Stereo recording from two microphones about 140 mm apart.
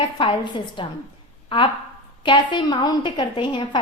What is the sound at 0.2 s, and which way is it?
A woman's voice, 35° left (ahead or behind).